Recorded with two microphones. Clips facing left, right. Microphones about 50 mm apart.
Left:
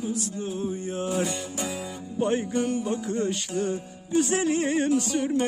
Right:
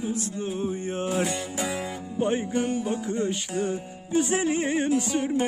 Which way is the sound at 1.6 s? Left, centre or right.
Right.